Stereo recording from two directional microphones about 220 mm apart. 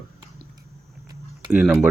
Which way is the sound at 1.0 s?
15° right (ahead or behind).